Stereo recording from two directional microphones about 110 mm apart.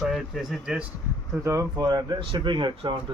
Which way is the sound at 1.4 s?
30° right (ahead or behind).